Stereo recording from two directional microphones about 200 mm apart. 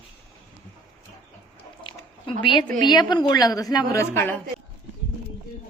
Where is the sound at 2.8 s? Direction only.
20° left (ahead or behind).